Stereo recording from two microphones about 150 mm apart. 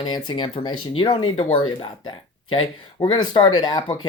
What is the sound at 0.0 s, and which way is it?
Speech, 30° left (ahead or behind).